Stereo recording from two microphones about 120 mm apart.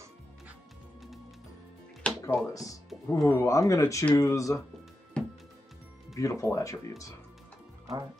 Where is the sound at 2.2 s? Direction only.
30° left (ahead or behind).